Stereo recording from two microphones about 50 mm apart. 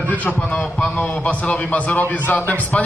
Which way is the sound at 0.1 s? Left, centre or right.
Left.